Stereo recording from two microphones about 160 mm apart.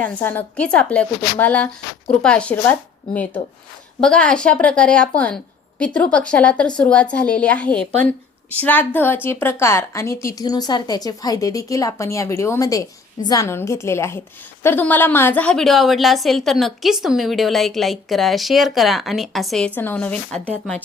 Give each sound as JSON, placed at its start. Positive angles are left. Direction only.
{"t": 0.0, "sound": "a woman's voice", "side_deg": 10}
{"t": 4.0, "sound": "a woman's voice", "side_deg": 5}